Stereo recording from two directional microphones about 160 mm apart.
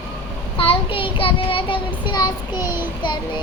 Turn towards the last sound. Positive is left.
turn(degrees=25)  # may be behind; listen again after turning